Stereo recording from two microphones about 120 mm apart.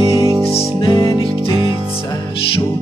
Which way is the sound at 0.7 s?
40° left (ahead or behind).